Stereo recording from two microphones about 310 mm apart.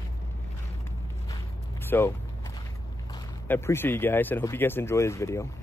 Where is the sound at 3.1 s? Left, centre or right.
Centre.